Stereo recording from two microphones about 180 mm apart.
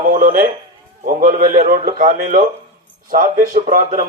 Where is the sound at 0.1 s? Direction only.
50° right (ahead or behind).